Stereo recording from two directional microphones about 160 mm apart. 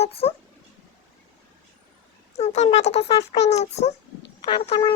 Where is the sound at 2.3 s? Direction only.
45° left (ahead or behind).